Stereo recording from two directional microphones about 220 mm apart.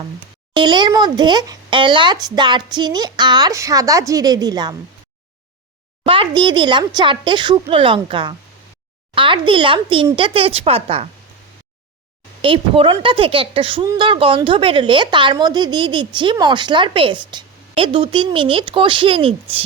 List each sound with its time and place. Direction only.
0.5 s speech: 20° right (ahead or behind)
6.1 s speech: 20° right (ahead or behind)
12.4 s speech: 25° right (ahead or behind)